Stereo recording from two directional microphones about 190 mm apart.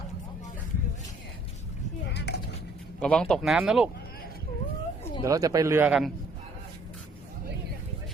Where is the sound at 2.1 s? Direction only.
60° left (ahead or behind).